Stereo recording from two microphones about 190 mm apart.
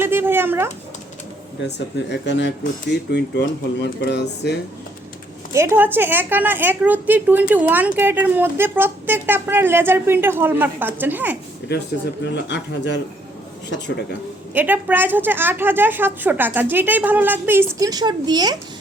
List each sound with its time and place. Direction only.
0.0 s speech: 10° right (ahead or behind)
1.6 s speech: 65° left (ahead or behind)
5.5 s a woman's voice: 10° right (ahead or behind)
12.2 s speech: 65° left (ahead or behind)
14.5 s a woman's voice: 10° right (ahead or behind)